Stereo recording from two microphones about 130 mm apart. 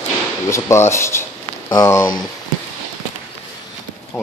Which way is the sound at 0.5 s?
20° left (ahead or behind).